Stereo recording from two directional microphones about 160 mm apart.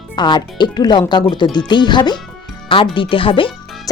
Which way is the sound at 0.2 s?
25° left (ahead or behind).